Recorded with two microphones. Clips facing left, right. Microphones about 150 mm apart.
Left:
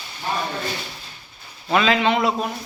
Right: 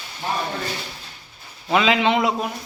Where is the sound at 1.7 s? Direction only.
15° right (ahead or behind).